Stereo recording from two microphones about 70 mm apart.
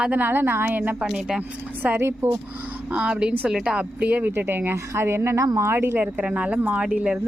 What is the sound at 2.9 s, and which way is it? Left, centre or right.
Speech, centre.